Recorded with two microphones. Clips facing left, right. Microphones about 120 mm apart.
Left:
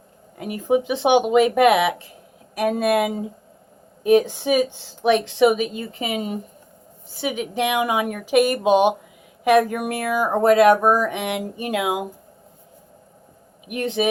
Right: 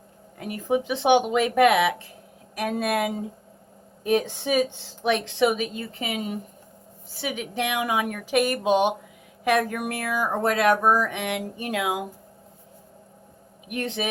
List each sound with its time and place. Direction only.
0.3 s speech: 15° left (ahead or behind)
13.7 s speech: 15° left (ahead or behind)